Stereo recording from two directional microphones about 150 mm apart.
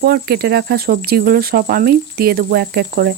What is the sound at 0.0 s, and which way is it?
Speech, 90° right.